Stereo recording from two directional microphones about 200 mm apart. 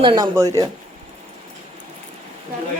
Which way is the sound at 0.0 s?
25° right (ahead or behind).